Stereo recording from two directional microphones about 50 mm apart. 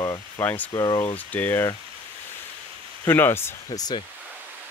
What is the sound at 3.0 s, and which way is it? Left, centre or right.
Speech, left.